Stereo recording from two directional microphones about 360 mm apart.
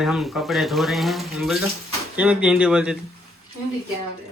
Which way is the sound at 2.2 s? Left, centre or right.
Centre.